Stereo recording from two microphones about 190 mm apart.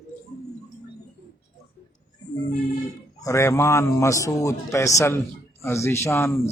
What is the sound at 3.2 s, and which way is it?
A man's voice, 15° left (ahead or behind).